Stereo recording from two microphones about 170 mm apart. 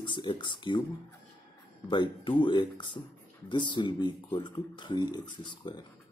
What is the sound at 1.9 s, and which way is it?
Speech, 30° left (ahead or behind).